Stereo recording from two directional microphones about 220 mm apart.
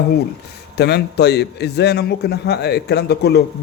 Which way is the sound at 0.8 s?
50° left (ahead or behind).